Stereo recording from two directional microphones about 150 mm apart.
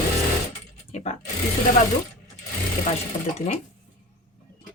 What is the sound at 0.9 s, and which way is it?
Speech, 50° left (ahead or behind).